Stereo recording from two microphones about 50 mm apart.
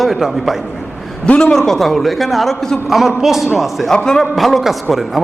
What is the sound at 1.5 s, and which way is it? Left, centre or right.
A man's voice, centre.